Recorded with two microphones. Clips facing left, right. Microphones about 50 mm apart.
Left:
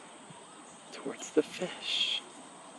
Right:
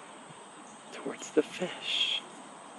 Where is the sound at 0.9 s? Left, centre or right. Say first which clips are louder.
Right 1 dB; right.